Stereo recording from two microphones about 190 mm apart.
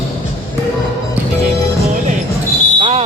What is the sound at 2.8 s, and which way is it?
Fire alarm, 30° right (ahead or behind).